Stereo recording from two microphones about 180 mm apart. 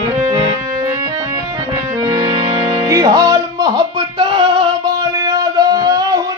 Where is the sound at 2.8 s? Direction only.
15° right (ahead or behind).